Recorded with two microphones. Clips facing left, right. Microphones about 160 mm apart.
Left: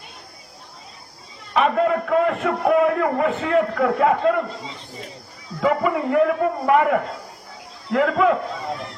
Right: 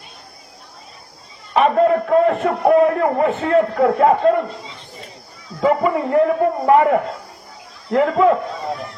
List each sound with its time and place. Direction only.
1.5 s a man's voice: 35° right (ahead or behind)
5.5 s a man's voice: 30° right (ahead or behind)